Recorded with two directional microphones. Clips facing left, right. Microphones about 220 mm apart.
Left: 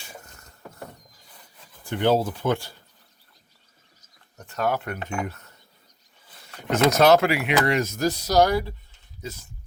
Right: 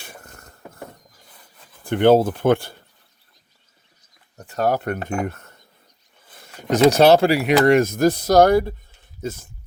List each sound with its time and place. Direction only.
0.0 s a sound: 55° right (ahead or behind)
1.8 s speech: 55° right (ahead or behind)
4.5 s speech: 40° right (ahead or behind)
6.6 s speech: 35° right (ahead or behind)